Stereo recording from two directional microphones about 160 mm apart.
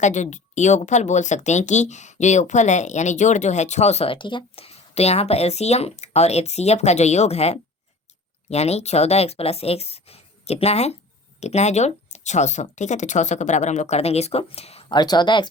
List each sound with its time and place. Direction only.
0.0 s speech: 50° left (ahead or behind); by 15.4 s 30° left (ahead or behind)